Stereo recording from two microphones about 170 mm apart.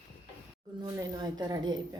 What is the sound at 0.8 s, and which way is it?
Speech, 20° right (ahead or behind).